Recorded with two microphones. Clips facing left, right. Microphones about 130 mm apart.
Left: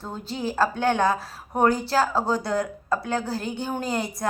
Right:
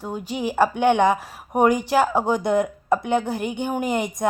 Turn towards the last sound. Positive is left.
turn(degrees=-20)  # may be behind; listen again after turning